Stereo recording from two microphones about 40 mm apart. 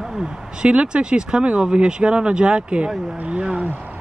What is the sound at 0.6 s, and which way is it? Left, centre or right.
Speech, right.